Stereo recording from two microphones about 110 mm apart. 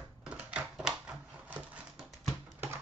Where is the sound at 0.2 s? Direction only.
10° right (ahead or behind).